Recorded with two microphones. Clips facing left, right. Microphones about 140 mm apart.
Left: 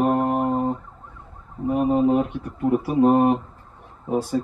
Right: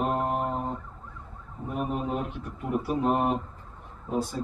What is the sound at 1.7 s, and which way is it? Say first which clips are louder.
Speech: left 11 dB; 55° left (ahead or behind).